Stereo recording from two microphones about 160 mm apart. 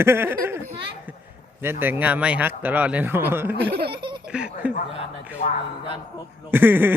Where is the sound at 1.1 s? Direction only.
10° right (ahead or behind).